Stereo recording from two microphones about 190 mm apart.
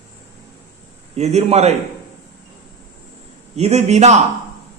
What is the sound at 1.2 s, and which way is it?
Speech, 35° right (ahead or behind).